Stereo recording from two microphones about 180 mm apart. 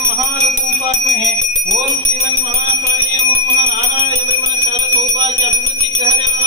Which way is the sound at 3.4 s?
10° right (ahead or behind).